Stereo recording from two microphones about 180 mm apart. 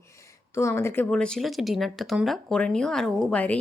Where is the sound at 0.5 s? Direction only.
15° left (ahead or behind).